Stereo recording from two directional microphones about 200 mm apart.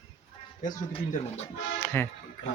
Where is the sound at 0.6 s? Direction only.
40° left (ahead or behind).